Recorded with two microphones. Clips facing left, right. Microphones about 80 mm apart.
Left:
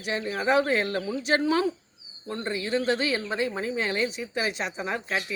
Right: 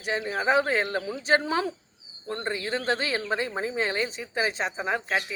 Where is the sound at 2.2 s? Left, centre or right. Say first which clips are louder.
Even; right.